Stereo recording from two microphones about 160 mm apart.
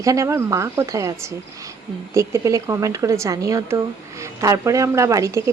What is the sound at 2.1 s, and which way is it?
A woman's voice, 15° right (ahead or behind).